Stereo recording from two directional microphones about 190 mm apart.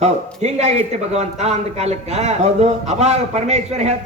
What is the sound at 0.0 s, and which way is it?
A man's voice, 35° right (ahead or behind).